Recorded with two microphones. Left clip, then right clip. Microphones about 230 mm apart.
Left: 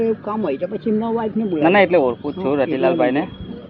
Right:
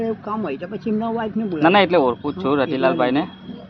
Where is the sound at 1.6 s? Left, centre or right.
Right.